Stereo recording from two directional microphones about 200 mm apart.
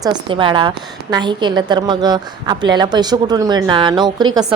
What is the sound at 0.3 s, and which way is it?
A woman's voice, 25° right (ahead or behind).